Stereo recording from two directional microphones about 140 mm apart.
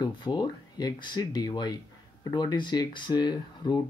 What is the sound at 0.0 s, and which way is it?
Speech, 30° left (ahead or behind).